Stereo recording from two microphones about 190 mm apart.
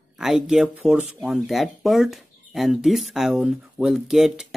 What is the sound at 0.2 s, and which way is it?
Speech, centre (ahead or behind).